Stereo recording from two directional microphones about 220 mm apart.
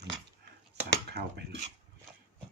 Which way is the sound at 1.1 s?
50° right (ahead or behind).